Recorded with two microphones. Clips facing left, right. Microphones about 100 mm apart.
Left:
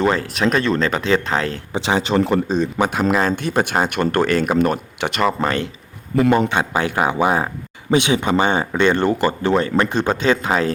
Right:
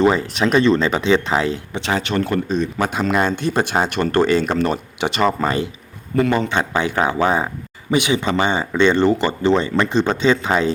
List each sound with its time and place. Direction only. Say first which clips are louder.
0.0 s speech: right 2 dB; 5° right (ahead or behind)
1.7 s speech: left 7 dB; 25° left (ahead or behind)
2.9 s speech: left 1 dB; 5° left (ahead or behind)
6.1 s speech: left 2 dB; 10° left (ahead or behind)